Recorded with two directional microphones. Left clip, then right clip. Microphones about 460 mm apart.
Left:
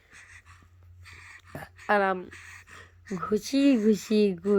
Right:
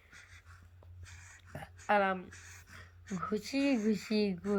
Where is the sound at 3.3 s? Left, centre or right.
Centre.